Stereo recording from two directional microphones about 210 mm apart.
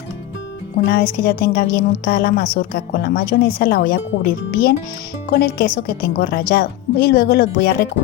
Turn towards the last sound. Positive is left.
turn(degrees=50)  # may be behind; listen again after turning